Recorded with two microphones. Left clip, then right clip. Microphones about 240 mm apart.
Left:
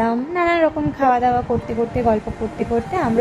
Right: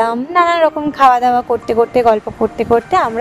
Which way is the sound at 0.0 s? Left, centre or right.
Right.